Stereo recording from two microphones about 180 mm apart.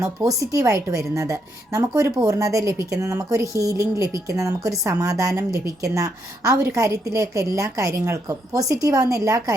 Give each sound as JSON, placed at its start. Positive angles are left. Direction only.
{"t": 0.0, "sound": "a woman's voice", "side_deg": -20}